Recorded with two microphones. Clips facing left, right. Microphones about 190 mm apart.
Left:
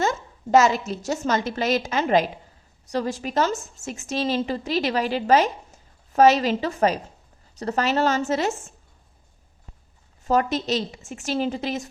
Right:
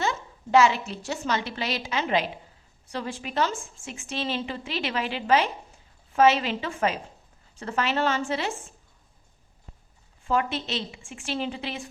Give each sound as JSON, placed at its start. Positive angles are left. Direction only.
{"t": 0.0, "sound": "a woman's voice", "side_deg": 45}
{"t": 10.2, "sound": "a woman's voice", "side_deg": 40}